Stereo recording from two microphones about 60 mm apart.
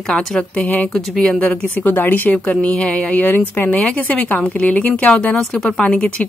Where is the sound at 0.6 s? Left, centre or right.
Left.